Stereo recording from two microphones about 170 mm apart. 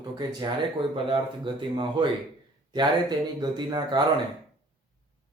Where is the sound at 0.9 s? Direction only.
30° right (ahead or behind).